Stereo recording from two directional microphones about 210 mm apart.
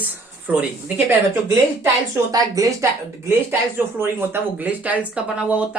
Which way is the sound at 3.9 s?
10° right (ahead or behind).